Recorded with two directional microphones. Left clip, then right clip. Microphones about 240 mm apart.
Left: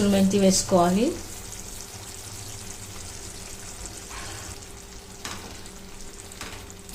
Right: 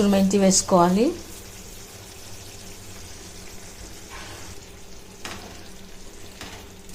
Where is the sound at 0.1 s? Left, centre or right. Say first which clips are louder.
Right 2 dB; right.